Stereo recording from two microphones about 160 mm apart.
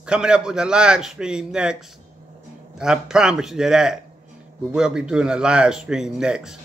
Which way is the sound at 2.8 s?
5° right (ahead or behind).